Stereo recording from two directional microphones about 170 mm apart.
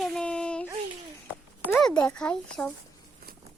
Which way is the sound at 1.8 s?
5° left (ahead or behind).